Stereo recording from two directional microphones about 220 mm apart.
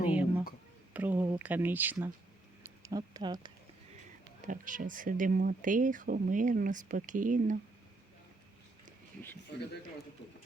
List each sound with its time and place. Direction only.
0.1 s a sound: 5° right (ahead or behind)
0.9 s speech: 10° right (ahead or behind)
4.4 s speech: 35° right (ahead or behind)